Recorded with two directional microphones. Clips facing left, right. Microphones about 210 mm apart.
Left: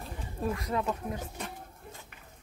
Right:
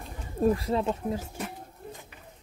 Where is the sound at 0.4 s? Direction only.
30° right (ahead or behind).